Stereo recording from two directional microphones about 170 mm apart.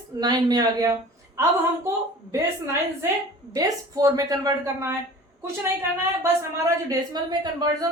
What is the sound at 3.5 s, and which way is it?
A woman's voice, 20° right (ahead or behind).